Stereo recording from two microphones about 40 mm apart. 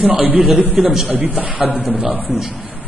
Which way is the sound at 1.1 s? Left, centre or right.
Right.